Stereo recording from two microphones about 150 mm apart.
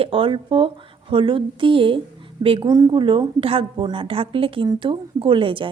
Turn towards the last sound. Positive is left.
turn(degrees=-35)  # may be behind; listen again after turning